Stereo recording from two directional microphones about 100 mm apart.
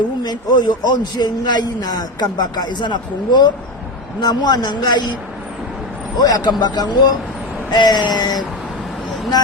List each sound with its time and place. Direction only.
0.2 s a man's voice: 45° left (ahead or behind)
6.1 s a man's voice: 40° left (ahead or behind)